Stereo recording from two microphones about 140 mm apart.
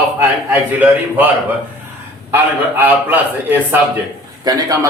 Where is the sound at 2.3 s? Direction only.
15° right (ahead or behind).